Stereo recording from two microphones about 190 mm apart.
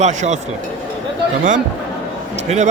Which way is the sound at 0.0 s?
40° right (ahead or behind).